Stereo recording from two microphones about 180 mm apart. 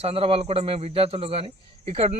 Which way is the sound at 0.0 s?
30° right (ahead or behind).